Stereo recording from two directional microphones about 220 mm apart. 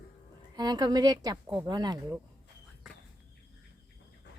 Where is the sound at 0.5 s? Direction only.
20° right (ahead or behind).